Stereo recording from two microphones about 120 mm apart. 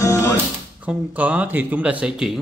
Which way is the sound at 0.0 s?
25° left (ahead or behind).